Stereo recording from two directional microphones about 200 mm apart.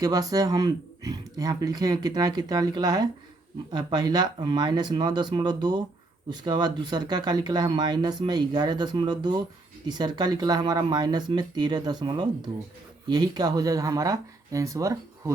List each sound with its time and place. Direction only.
0.0 s speech: 20° right (ahead or behind)